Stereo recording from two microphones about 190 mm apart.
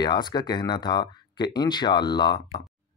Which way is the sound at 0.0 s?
20° left (ahead or behind).